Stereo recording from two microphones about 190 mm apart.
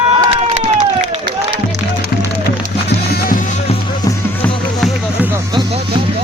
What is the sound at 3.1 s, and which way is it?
Music, 50° left (ahead or behind).